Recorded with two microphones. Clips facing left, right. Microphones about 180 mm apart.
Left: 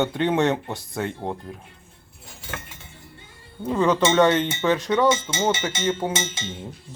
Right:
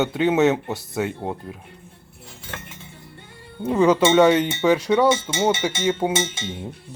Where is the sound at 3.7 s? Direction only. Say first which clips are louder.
Right 3 dB; 10° right (ahead or behind).